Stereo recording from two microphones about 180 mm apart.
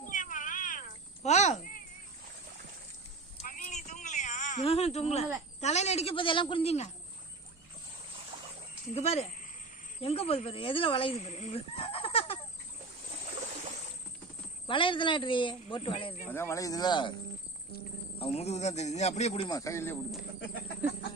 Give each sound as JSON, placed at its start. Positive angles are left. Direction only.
{"t": 0.0, "sound": "cat", "side_deg": 45}
{"t": 3.4, "sound": "a sound", "side_deg": 45}
{"t": 5.5, "sound": "a woman's voice", "side_deg": 40}
{"t": 8.9, "sound": "a woman's voice", "side_deg": 35}
{"t": 14.7, "sound": "speech", "side_deg": 30}
{"t": 16.2, "sound": "speech", "side_deg": 15}
{"t": 18.2, "sound": "a woman's voice", "side_deg": 35}
{"t": 19.5, "sound": "a man's voice", "side_deg": 20}